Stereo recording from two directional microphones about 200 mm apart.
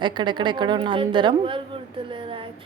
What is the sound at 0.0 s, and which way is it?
A woman's voice, 25° right (ahead or behind).